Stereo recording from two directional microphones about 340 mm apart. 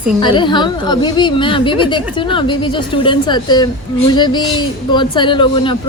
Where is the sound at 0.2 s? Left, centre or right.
Centre.